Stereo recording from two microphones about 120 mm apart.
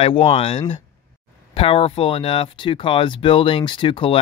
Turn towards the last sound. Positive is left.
turn(degrees=45)  # may be behind; listen again after turning